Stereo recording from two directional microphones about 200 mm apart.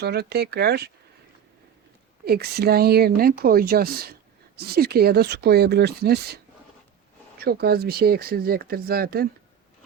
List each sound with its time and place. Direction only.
0.0 s speech: 55° right (ahead or behind)
2.2 s speech: 50° right (ahead or behind)